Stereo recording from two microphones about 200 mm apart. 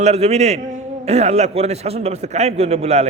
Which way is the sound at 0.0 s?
30° right (ahead or behind).